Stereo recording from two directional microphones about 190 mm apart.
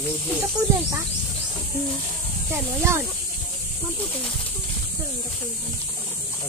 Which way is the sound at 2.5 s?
15° right (ahead or behind).